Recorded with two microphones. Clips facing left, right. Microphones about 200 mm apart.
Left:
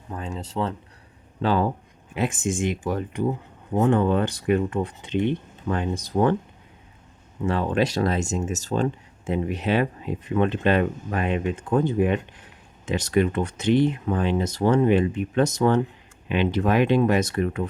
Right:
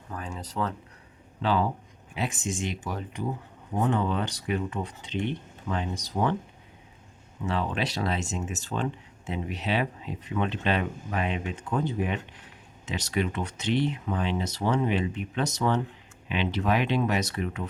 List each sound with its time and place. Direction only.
0.1 s speech: 25° left (ahead or behind)
1.4 s speech: 45° left (ahead or behind)
7.4 s speech: 45° left (ahead or behind)